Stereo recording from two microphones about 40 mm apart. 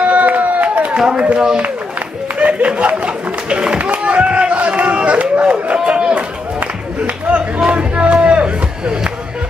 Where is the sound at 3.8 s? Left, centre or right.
Right.